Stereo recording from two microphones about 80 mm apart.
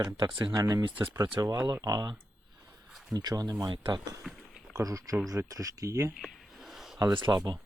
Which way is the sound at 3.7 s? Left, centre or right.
Right.